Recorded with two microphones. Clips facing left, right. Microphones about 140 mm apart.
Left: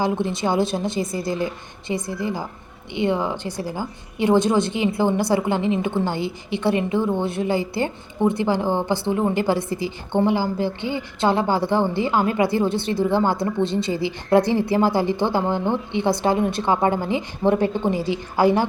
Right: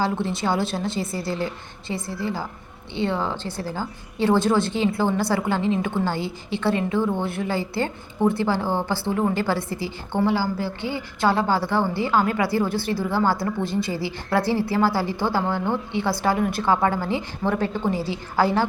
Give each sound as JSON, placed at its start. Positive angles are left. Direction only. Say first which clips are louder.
{"t": 0.0, "sound": "a woman's voice", "louder": "left 2 dB", "side_deg": 20}